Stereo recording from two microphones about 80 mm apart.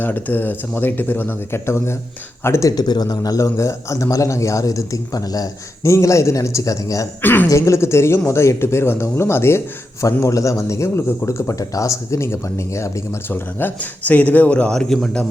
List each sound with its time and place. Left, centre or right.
0.0 s speech: left
2.6 s a man's voice: left
7.2 s a woman's voice: left
7.4 s speech: left; by 15.2 s centre